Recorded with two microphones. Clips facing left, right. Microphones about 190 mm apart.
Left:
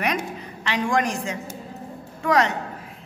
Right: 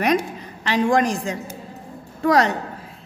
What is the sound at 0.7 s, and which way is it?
A woman's voice, 35° right (ahead or behind).